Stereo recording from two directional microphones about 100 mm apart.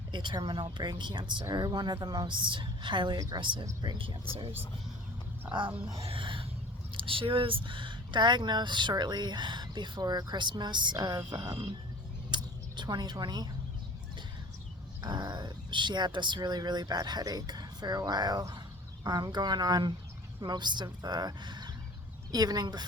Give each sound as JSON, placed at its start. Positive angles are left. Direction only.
{"t": 0.1, "sound": "speech", "side_deg": -50}
{"t": 3.2, "sound": "speech", "side_deg": -35}
{"t": 3.4, "sound": "speech", "side_deg": -55}
{"t": 6.0, "sound": "a sound", "side_deg": -65}
{"t": 6.9, "sound": "speech", "side_deg": -60}
{"t": 12.3, "sound": "a sound", "side_deg": -45}
{"t": 15.0, "sound": "speech", "side_deg": -45}